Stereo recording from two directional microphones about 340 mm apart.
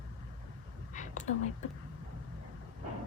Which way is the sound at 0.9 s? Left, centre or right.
Left.